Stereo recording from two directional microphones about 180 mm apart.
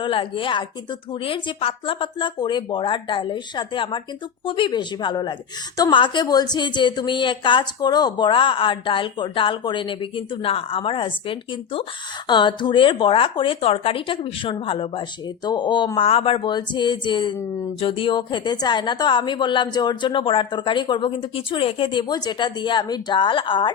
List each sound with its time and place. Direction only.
0.0 s speech: 30° left (ahead or behind)